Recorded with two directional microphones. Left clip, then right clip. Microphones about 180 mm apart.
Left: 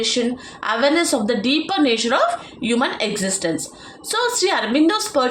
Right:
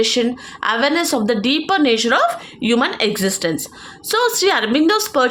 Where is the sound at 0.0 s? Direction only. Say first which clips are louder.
Right 3 dB; 50° right (ahead or behind).